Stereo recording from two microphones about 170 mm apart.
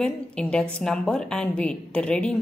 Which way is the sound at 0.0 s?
5° left (ahead or behind).